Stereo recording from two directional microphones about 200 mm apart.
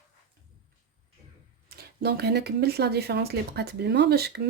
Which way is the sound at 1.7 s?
55° right (ahead or behind).